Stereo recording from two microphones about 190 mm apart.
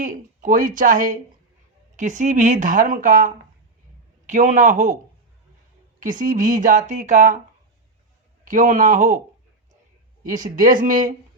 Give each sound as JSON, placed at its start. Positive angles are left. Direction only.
{"t": 0.0, "sound": "a man's voice", "side_deg": -40}
{"t": 6.0, "sound": "speech", "side_deg": -45}
{"t": 8.4, "sound": "a man's voice", "side_deg": -40}
{"t": 10.2, "sound": "speech", "side_deg": -45}